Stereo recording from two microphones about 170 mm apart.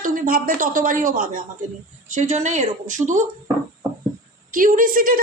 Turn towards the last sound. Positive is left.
turn(degrees=-55)  # may be behind; listen again after turning